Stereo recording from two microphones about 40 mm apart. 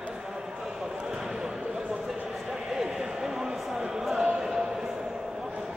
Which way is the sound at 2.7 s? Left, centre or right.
Centre.